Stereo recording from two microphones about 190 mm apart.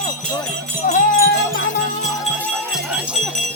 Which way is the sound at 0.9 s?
45° left (ahead or behind).